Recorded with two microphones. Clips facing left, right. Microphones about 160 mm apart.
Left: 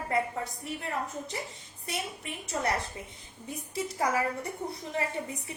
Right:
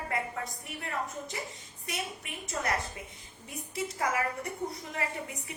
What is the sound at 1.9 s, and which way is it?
A woman's voice, 30° left (ahead or behind).